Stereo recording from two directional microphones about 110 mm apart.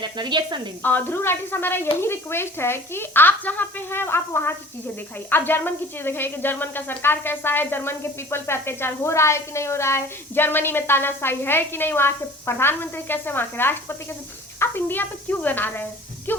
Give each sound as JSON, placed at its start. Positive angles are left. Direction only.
{"t": 0.0, "sound": "speech", "side_deg": -45}
{"t": 0.8, "sound": "speech", "side_deg": 15}